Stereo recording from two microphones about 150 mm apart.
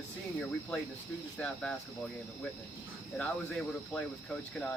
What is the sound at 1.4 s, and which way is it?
Speech, 5° left (ahead or behind).